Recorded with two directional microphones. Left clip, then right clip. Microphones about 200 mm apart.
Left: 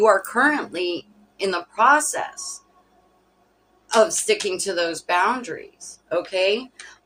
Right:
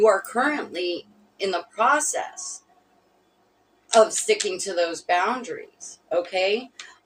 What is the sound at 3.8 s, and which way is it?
Speech, 20° left (ahead or behind).